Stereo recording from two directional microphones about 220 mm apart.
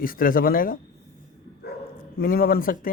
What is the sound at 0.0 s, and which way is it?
Speech, 40° left (ahead or behind).